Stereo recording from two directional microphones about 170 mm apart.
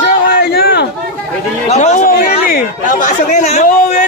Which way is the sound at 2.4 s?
55° left (ahead or behind).